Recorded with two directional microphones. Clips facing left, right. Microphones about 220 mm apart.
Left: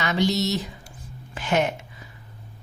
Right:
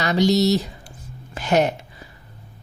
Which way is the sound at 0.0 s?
35° right (ahead or behind).